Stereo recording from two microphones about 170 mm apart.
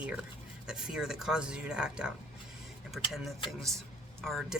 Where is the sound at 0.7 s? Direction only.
5° right (ahead or behind).